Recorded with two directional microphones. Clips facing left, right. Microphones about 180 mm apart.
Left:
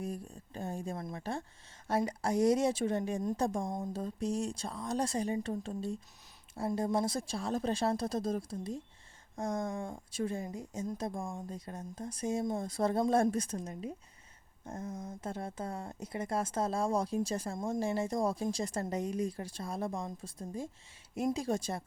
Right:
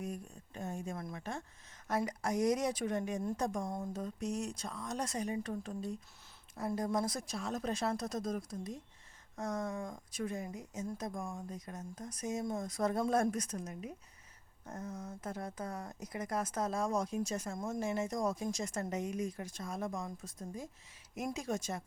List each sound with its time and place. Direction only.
0.0 s speech: 30° left (ahead or behind)
14.6 s a sound: 30° left (ahead or behind)
15.2 s speech: 30° left (ahead or behind)